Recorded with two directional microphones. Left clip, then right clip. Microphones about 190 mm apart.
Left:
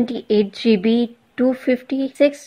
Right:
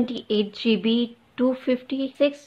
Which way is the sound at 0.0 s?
30° left (ahead or behind).